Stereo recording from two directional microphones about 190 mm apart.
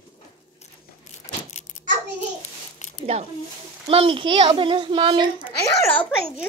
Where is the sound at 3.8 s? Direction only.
30° right (ahead or behind).